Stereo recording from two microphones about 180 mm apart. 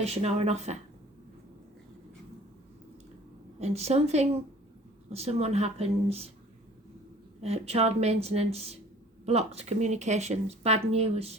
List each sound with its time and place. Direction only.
0.0 s a woman's voice: 35° right (ahead or behind)
3.6 s a woman's voice: 35° right (ahead or behind)
7.4 s a woman's voice: 35° right (ahead or behind)